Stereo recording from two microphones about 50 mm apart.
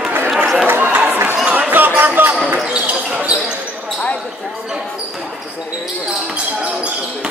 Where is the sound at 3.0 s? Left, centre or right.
Centre.